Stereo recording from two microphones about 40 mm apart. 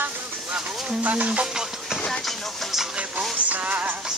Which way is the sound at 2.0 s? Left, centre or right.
Centre.